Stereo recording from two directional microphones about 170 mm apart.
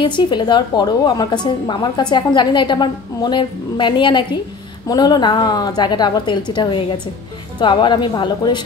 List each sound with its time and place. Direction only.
0.0 s a woman's voice: 30° left (ahead or behind)